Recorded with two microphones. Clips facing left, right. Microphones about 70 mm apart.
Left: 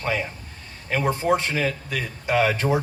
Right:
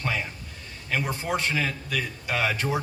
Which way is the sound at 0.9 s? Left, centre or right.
Left.